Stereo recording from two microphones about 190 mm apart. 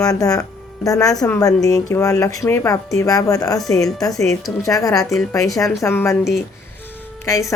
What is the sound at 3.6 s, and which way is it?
Speech, centre (ahead or behind).